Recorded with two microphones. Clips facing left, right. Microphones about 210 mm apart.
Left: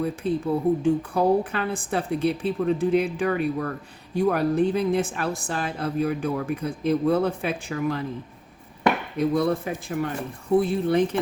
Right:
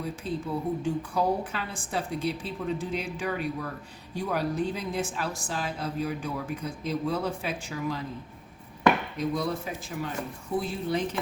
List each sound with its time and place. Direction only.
0.0 s a woman's voice: 55° left (ahead or behind)
9.1 s a woman's voice: 55° left (ahead or behind)